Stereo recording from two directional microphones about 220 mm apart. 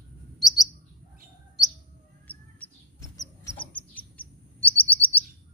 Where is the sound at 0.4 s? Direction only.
Centre (ahead or behind).